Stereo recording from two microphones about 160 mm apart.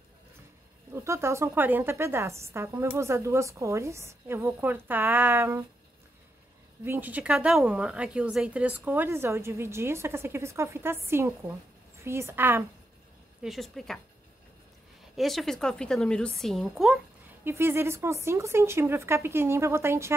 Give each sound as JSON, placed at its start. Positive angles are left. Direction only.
{"t": 0.9, "sound": "a woman's voice", "side_deg": -15}
{"t": 6.8, "sound": "a woman's voice", "side_deg": -15}
{"t": 13.4, "sound": "a woman's voice", "side_deg": 0}
{"t": 15.1, "sound": "a woman's voice", "side_deg": 0}
{"t": 17.5, "sound": "a woman's voice", "side_deg": -15}